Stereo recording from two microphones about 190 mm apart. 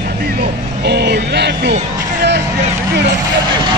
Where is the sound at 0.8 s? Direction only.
60° right (ahead or behind).